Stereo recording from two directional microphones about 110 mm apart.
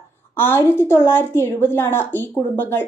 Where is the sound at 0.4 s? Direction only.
20° left (ahead or behind).